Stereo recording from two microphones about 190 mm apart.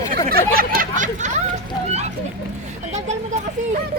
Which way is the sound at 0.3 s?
50° right (ahead or behind).